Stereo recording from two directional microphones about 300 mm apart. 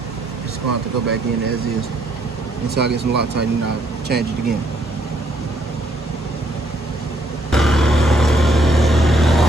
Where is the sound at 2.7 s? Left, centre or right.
Right.